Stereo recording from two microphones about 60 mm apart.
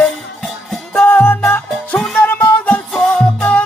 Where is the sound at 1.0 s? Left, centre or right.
Left.